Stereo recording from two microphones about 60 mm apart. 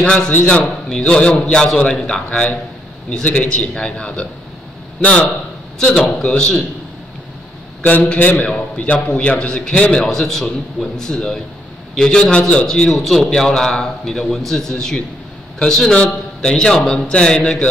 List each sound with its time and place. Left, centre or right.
0.0 s a man's voice: left
0.8 s a man's voice: centre
3.3 s a man's voice: centre
5.8 s a man's voice: centre
7.8 s a man's voice: left; by 17.6 s centre